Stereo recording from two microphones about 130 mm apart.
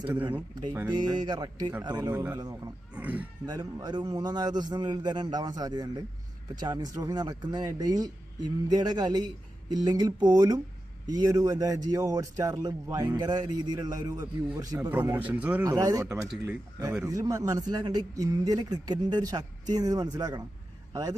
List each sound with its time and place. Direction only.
0.1 s a man's voice: 15° right (ahead or behind)
0.9 s speech: 35° right (ahead or behind)
2.0 s a man's voice: 15° right (ahead or behind)
3.4 s a man's voice: 30° right (ahead or behind)
14.8 s a man's voice: 15° right (ahead or behind)
15.8 s a man's voice: 30° right (ahead or behind)